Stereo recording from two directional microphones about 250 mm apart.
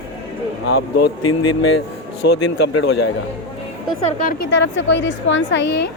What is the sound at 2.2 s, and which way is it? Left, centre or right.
Speech, left.